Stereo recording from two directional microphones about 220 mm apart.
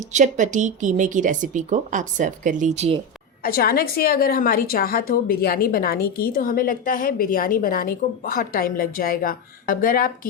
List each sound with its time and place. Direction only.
0.1 s speech: 35° right (ahead or behind)
3.4 s a woman's voice: 45° left (ahead or behind)